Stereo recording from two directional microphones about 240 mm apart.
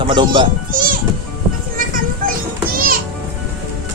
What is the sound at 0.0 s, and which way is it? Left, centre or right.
Speech, centre.